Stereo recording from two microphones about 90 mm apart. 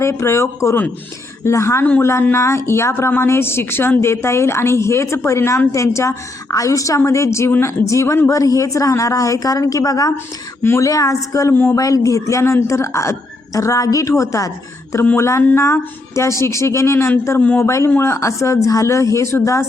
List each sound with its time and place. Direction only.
0.0 s a woman's voice: 30° left (ahead or behind)
1.8 s a woman's voice: 20° left (ahead or behind); by 10.2 s 40° left (ahead or behind)
10.6 s a woman's voice: 25° left (ahead or behind)
10.8 s a woman's voice: 40° left (ahead or behind)
11.5 s speech: 25° left (ahead or behind)
11.8 s a woman's voice: 40° left (ahead or behind); by 17.6 s 20° left (ahead or behind)
17.6 s a woman's voice: 35° left (ahead or behind)